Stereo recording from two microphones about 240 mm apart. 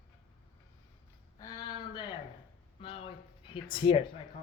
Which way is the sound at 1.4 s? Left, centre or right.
Centre.